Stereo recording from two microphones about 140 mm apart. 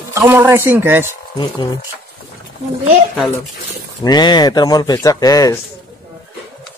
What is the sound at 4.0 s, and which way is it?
Speech, 30° left (ahead or behind).